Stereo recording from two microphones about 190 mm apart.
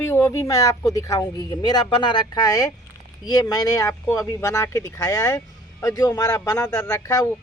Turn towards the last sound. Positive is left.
turn(degrees=20)  # may be behind; listen again after turning